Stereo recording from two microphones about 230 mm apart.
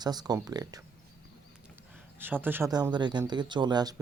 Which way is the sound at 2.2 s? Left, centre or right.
Centre.